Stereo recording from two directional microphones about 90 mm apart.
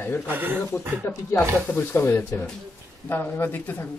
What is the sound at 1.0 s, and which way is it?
A man's voice, 25° left (ahead or behind).